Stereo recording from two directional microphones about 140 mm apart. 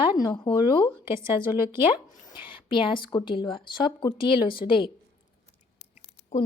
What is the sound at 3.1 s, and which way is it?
Speech, 35° left (ahead or behind).